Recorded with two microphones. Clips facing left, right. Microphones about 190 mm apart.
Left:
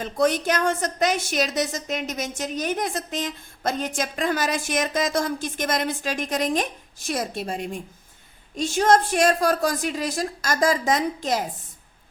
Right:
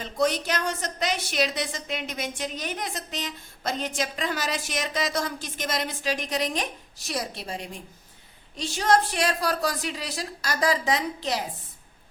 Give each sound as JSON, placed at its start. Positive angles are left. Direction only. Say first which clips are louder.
{"t": 0.0, "sound": "a woman's voice", "louder": "left 4 dB", "side_deg": 50}